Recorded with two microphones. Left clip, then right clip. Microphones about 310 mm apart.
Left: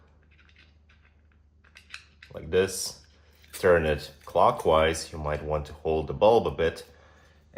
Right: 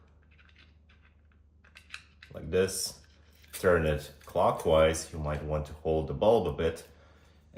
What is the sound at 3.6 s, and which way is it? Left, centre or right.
Speech, left.